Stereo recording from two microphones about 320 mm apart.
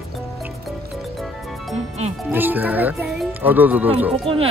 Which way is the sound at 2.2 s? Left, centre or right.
Centre.